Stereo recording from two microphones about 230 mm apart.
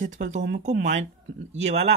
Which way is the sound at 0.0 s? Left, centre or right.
Right.